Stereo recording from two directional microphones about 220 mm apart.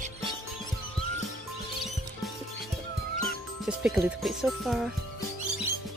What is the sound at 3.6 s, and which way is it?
Speech, 5° right (ahead or behind).